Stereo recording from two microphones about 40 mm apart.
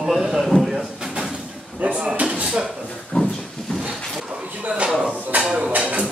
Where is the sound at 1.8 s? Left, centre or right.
Right.